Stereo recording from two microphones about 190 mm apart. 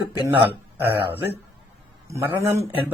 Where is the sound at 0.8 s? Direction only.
10° right (ahead or behind).